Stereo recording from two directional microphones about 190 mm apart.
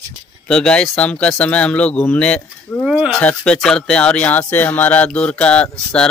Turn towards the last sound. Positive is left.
turn(degrees=5)  # may be behind; listen again after turning